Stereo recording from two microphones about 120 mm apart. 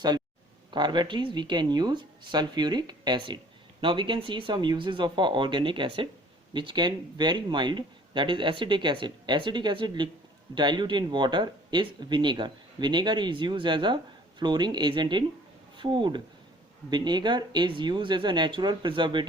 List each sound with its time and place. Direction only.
0.7 s speech: 40° right (ahead or behind)